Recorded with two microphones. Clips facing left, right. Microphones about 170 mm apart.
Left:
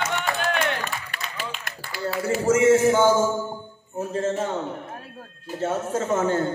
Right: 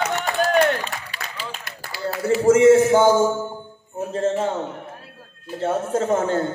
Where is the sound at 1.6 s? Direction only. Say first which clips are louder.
Right 3 dB; 50° left (ahead or behind).